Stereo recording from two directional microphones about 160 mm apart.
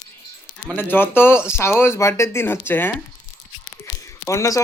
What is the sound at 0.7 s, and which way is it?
Speech, 15° left (ahead or behind).